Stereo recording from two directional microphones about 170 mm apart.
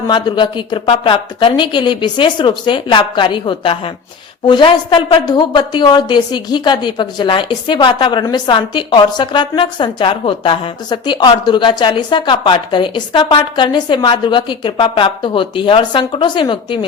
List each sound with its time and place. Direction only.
0.1 s a woman's voice: 25° left (ahead or behind)